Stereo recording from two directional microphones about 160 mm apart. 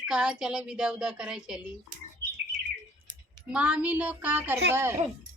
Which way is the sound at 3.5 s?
5° right (ahead or behind).